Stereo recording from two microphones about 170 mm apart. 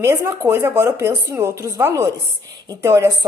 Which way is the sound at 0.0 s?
15° right (ahead or behind).